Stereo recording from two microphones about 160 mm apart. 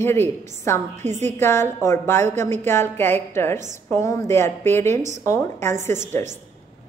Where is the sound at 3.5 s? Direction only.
50° right (ahead or behind).